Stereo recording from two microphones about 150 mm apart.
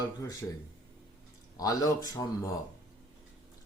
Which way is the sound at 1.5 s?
20° left (ahead or behind).